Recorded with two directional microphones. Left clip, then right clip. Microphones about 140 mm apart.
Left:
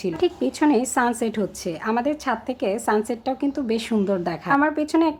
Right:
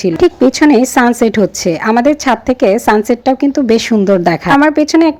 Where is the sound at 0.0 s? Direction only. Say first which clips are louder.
Right 13 dB; 45° right (ahead or behind).